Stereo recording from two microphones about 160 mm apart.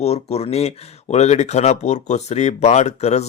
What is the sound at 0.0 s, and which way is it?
Speech, 40° left (ahead or behind).